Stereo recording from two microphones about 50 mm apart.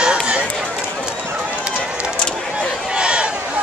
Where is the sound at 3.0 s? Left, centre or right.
Centre.